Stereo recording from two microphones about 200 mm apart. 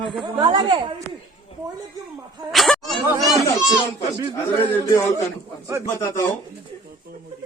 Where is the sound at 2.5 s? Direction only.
Centre (ahead or behind).